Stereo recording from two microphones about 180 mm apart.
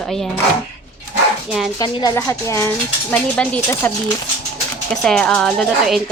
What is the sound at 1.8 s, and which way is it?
Speech, 20° left (ahead or behind).